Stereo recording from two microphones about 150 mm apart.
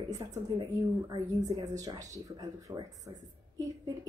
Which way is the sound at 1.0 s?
25° right (ahead or behind).